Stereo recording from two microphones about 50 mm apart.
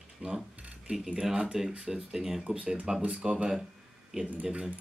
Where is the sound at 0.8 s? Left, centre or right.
Centre.